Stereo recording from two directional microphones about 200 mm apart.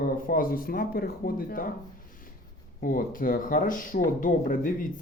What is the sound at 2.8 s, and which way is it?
Speech, 45° left (ahead or behind).